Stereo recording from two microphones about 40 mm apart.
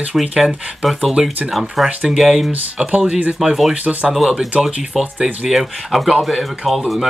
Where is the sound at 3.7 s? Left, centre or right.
Right.